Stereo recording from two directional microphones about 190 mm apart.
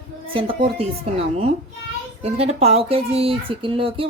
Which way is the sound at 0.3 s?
30° right (ahead or behind).